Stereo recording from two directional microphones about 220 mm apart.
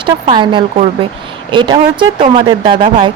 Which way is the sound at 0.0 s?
20° right (ahead or behind).